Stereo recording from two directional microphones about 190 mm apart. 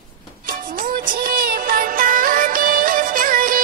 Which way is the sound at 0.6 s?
45° right (ahead or behind).